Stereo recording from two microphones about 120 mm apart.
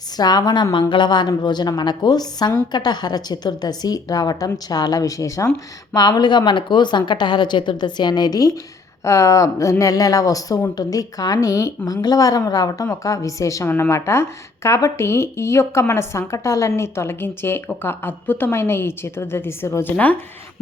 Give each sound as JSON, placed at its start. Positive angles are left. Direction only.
{"t": 0.2, "sound": "a woman's voice", "side_deg": 35}